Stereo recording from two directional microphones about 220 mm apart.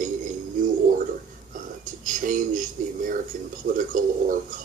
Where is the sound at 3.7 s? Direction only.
35° right (ahead or behind).